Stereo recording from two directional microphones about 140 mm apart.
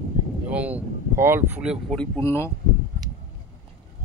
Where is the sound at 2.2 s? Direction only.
20° left (ahead or behind).